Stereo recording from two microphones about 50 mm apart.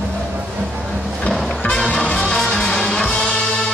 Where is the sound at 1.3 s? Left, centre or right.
Centre.